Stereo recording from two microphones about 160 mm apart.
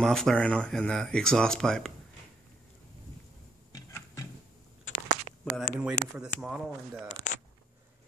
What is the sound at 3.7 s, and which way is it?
Music, 20° left (ahead or behind).